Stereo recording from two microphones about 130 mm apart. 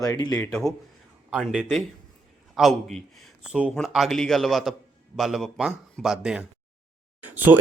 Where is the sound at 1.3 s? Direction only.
5° right (ahead or behind).